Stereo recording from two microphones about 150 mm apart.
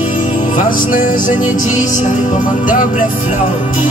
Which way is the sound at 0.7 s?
65° left (ahead or behind).